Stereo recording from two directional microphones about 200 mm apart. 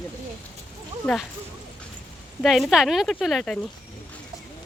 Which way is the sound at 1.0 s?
10° left (ahead or behind).